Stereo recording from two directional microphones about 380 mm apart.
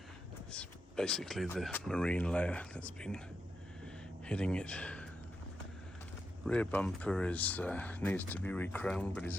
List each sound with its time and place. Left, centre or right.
0.5 s speech: centre
4.3 s speech: centre
6.4 s speech: centre